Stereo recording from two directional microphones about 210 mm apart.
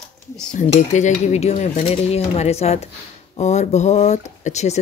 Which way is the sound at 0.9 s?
35° left (ahead or behind).